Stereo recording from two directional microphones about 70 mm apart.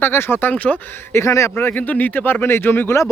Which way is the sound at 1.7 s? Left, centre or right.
Left.